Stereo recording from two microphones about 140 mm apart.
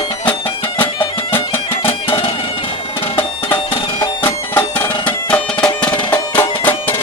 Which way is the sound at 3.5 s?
35° left (ahead or behind).